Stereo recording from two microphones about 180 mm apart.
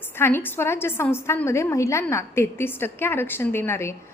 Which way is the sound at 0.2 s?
10° left (ahead or behind).